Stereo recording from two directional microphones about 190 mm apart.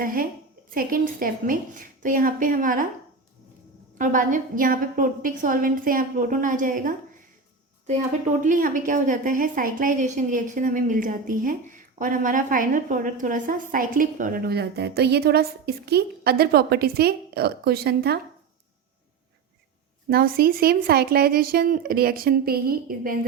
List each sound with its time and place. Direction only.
0.0 s a woman's voice: 45° right (ahead or behind)
3.9 s a woman's voice: 45° right (ahead or behind)
8.4 s a woman's voice: 45° right (ahead or behind)
20.1 s a woman's voice: 50° right (ahead or behind)